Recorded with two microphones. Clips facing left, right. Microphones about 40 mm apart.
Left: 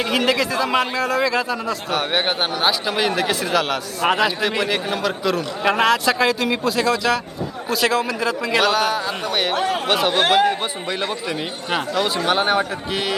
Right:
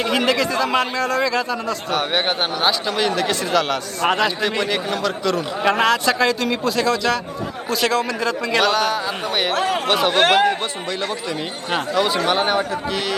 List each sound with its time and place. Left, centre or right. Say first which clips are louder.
0.0 s a man's voice: even; centre
9.6 s speech: right 1 dB; right
9.8 s a man's voice: right 1 dB; centre
10.1 s speech: right 1 dB; right
11.0 s speech: even; left
11.9 s a man's voice: right 4 dB; centre
12.2 s a man's voice: even; centre